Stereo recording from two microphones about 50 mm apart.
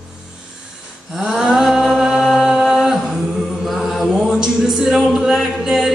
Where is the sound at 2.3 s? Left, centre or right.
Centre.